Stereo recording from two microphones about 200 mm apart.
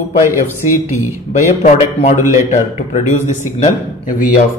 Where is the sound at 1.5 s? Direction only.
30° left (ahead or behind).